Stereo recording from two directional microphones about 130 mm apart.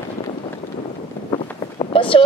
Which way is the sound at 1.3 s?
40° left (ahead or behind).